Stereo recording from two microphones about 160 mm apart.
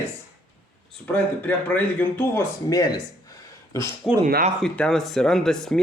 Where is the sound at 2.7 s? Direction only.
20° left (ahead or behind).